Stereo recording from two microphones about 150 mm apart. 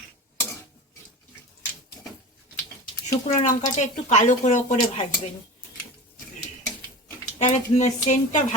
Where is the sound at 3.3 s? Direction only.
50° left (ahead or behind).